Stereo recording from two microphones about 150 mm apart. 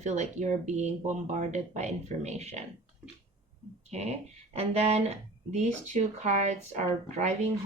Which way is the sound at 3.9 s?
45° right (ahead or behind).